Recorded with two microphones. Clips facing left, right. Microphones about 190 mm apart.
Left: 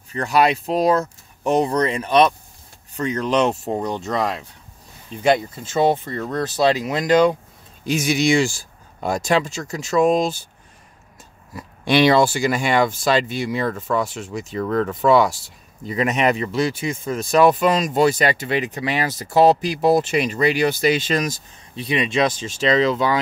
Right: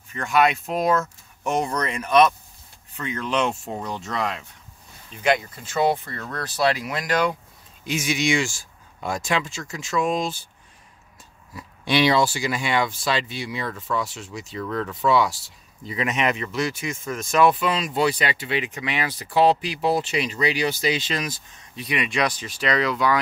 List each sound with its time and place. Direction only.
0.1 s speech: 35° left (ahead or behind)
2.9 s speech: 40° left (ahead or behind); by 7.3 s 20° left (ahead or behind)
7.8 s speech: 35° left (ahead or behind)
11.5 s speech: 50° left (ahead or behind)
21.7 s speech: 25° left (ahead or behind)